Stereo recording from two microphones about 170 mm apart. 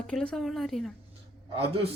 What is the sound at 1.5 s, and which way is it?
Speech, 35° right (ahead or behind).